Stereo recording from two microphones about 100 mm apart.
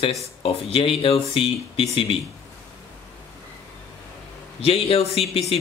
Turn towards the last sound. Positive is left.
turn(degrees=80)